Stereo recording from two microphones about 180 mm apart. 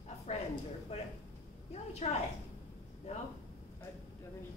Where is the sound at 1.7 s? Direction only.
35° left (ahead or behind).